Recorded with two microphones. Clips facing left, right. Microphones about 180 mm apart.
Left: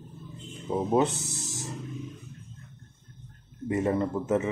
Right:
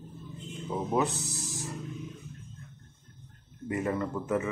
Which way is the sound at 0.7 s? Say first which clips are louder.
Left 4 dB; 25° left (ahead or behind).